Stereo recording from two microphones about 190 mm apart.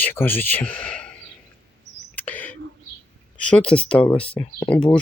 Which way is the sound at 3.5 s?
5° left (ahead or behind).